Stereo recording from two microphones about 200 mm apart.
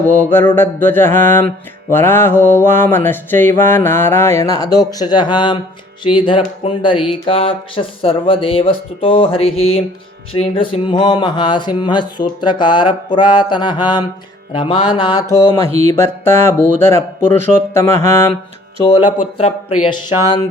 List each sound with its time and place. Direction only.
0.0 s mantra: 10° left (ahead or behind)
4.8 s speech: 20° left (ahead or behind)
15.4 s speech: 25° right (ahead or behind)
15.9 s mantra: 10° left (ahead or behind)
18.9 s speech: 20° left (ahead or behind)
19.1 s speech: 35° left (ahead or behind)
19.8 s speech: 25° left (ahead or behind)